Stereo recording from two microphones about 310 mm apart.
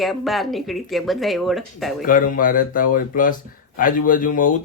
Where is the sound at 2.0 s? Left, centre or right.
Left.